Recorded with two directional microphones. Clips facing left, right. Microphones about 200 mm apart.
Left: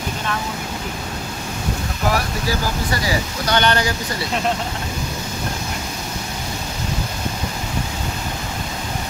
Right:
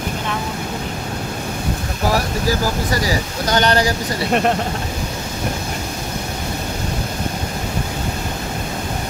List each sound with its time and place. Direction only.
3.4 s speech: 40° right (ahead or behind)